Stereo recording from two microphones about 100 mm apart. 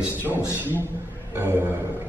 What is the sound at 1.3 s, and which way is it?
Speech, 25° right (ahead or behind).